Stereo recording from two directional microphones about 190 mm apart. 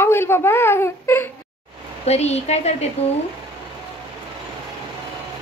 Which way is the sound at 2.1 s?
35° left (ahead or behind).